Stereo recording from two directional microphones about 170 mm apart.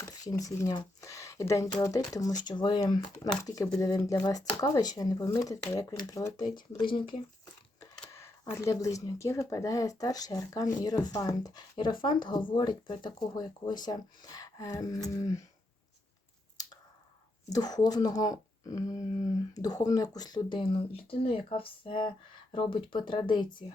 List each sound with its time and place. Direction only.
0.0 s speech: 20° left (ahead or behind)
8.1 s speech: 15° left (ahead or behind)
17.5 s speech: 25° left (ahead or behind)